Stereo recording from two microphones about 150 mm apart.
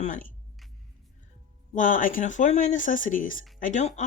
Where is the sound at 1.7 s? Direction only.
60° left (ahead or behind).